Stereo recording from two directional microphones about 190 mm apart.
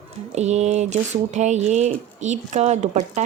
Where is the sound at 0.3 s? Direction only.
35° right (ahead or behind).